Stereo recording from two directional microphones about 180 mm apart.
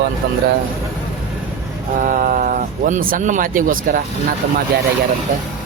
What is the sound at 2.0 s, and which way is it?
Speech, 45° right (ahead or behind).